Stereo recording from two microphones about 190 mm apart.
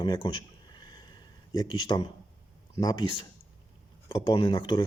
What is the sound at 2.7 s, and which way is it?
Speech, 20° left (ahead or behind).